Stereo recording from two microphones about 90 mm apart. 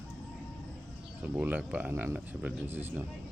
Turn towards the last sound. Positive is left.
turn(degrees=-20)  # may be behind; listen again after turning